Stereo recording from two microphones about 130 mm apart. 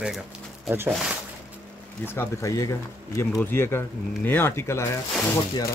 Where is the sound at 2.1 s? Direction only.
25° left (ahead or behind).